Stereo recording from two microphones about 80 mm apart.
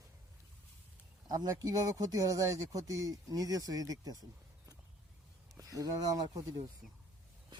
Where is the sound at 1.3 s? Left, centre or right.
Right.